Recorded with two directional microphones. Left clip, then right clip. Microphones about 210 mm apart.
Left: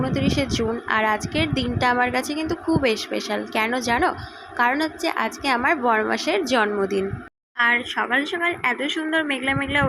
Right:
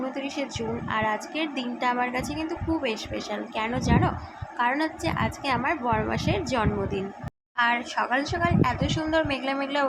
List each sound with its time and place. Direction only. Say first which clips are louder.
0.1 s a woman's voice: left 8 dB; 15° left (ahead or behind)